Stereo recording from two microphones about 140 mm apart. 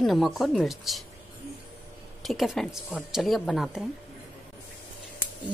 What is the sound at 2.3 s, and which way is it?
A woman's voice, centre (ahead or behind).